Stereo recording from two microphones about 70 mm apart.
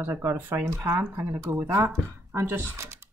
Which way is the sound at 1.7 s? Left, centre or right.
Right.